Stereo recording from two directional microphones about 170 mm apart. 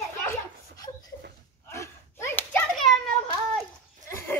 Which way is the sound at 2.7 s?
Centre (ahead or behind).